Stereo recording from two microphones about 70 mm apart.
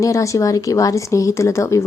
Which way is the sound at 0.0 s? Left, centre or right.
Left.